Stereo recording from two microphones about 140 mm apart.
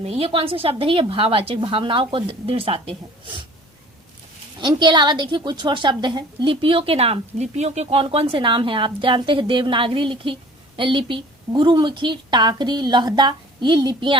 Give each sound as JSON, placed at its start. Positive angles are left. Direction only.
{"t": 0.0, "sound": "a woman's voice", "side_deg": -45}
{"t": 4.5, "sound": "a woman's voice", "side_deg": -30}